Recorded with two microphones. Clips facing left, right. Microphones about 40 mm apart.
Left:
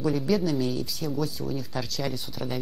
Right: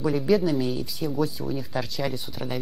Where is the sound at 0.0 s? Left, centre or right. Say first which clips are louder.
Right 3 dB; centre.